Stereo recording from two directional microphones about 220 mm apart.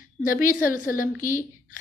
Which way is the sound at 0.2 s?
40° left (ahead or behind).